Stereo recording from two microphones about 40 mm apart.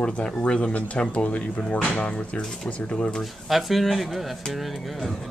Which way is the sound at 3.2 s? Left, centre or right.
Centre.